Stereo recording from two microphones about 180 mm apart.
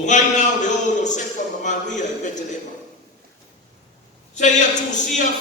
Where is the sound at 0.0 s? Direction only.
40° left (ahead or behind).